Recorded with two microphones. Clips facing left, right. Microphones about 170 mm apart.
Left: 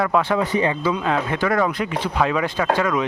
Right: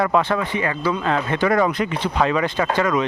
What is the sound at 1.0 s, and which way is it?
Speech, 10° left (ahead or behind).